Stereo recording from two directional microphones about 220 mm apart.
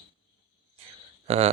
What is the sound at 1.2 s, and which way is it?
Speech, 30° right (ahead or behind).